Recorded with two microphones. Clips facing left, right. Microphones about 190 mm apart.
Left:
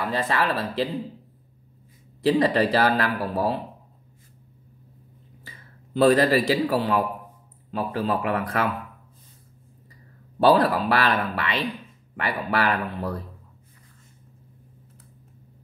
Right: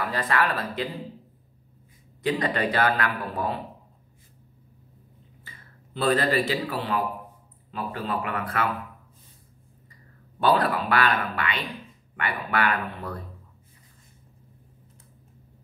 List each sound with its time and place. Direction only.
0.1 s speech: 25° left (ahead or behind)
2.2 s a man's voice: 35° left (ahead or behind)
5.9 s a man's voice: 40° left (ahead or behind)
8.1 s a man's voice: 35° left (ahead or behind)
10.4 s a man's voice: 35° left (ahead or behind)